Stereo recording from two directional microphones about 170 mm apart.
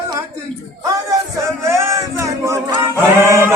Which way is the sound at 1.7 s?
15° right (ahead or behind).